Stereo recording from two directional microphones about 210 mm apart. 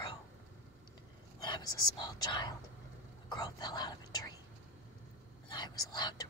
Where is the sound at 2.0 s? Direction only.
20° left (ahead or behind).